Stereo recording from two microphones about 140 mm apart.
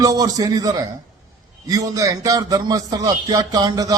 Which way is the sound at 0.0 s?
25° right (ahead or behind).